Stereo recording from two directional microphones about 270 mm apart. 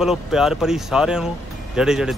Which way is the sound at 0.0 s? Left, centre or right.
Centre.